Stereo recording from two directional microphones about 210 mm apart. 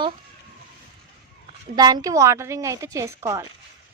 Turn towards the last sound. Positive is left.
turn(degrees=-15)  # may be behind; listen again after turning